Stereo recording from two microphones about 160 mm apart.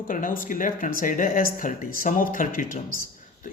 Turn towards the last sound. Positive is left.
turn(degrees=60)  # may be behind; listen again after turning